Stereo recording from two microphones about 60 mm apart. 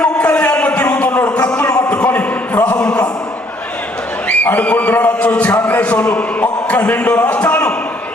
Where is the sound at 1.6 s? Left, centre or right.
Left.